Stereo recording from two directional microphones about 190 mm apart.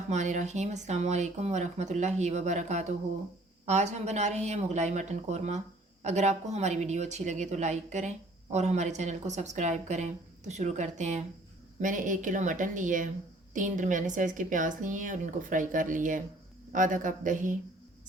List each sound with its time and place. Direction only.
0.1 s a woman's voice: 40° right (ahead or behind)